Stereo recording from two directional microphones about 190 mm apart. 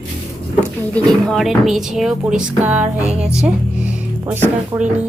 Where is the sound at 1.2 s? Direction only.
Centre (ahead or behind).